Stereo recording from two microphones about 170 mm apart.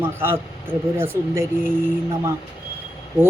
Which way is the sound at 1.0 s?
15° right (ahead or behind).